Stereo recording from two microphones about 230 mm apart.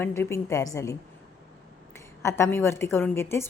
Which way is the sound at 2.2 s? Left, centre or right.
Centre.